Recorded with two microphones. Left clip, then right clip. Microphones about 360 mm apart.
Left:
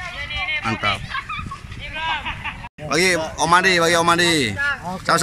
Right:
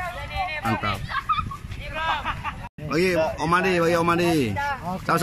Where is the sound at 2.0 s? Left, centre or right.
Right.